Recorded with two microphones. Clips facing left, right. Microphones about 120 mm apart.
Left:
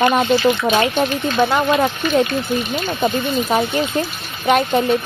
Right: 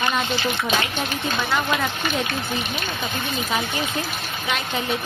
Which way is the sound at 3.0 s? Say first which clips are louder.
Left 12 dB; 45° left (ahead or behind).